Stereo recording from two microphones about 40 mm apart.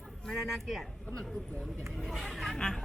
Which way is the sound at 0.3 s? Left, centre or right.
Centre.